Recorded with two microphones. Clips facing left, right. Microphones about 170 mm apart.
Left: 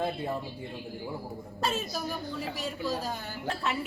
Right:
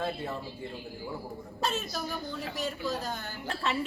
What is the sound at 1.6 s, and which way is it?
A woman's voice, 5° left (ahead or behind).